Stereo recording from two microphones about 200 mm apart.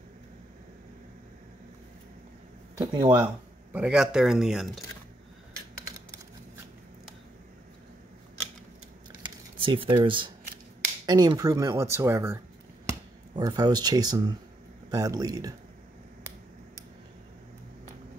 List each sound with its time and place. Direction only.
2.8 s speech: 20° right (ahead or behind)
3.7 s speech: 5° right (ahead or behind)
9.2 s typing: 25° right (ahead or behind)
11.1 s speech: 20° right (ahead or behind)
13.4 s speech: 20° right (ahead or behind)